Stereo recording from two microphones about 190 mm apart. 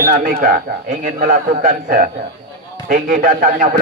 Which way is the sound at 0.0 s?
50° right (ahead or behind).